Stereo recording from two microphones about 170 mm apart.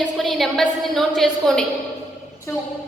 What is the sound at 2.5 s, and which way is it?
Speech, 15° left (ahead or behind).